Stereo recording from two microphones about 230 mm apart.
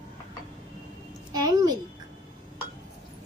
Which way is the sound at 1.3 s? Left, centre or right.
Centre.